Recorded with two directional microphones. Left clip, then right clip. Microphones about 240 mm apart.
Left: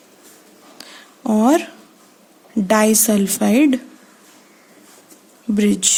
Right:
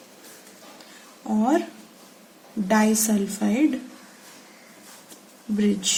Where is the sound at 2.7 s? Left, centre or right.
Left.